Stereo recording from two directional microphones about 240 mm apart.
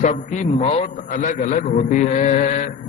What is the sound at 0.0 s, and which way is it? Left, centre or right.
A man's voice, left.